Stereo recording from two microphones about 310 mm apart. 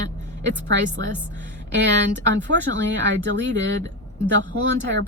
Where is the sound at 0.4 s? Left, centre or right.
Right.